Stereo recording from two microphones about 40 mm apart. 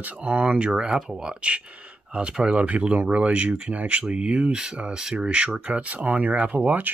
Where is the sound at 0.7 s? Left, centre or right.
Centre.